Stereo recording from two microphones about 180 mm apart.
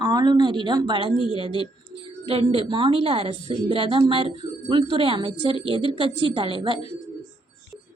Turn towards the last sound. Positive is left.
turn(degrees=-30)  # may be behind; listen again after turning